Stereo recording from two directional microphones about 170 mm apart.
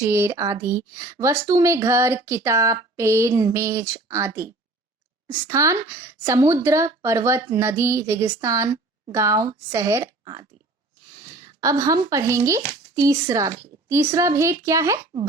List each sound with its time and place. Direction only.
0.0 s speech: 15° right (ahead or behind)